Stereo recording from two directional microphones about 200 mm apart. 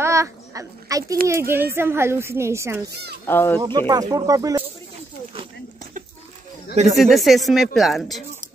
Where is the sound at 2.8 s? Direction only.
55° right (ahead or behind).